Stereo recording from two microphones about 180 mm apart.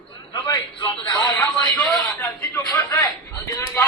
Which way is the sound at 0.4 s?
25° left (ahead or behind).